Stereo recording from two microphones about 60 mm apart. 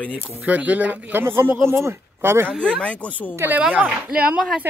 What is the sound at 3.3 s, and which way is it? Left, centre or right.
Speech, right.